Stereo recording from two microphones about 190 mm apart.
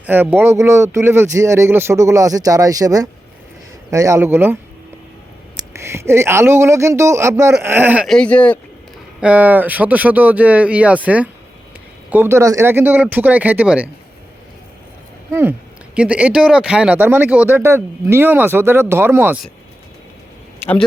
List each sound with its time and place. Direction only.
0.0 s speech: 10° right (ahead or behind)
5.5 s speech: 15° right (ahead or behind)
8.0 s speech: 5° left (ahead or behind)
9.2 s speech: 10° right (ahead or behind)
15.3 s speech: 10° right (ahead or behind)